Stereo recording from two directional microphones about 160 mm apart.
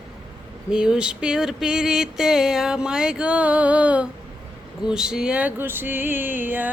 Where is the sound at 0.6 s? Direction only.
5° right (ahead or behind).